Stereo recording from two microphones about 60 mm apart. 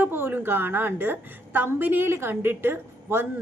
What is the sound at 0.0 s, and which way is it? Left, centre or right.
A woman's voice, right.